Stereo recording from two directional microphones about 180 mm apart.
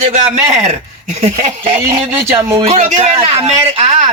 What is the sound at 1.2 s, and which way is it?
Speech, 35° right (ahead or behind).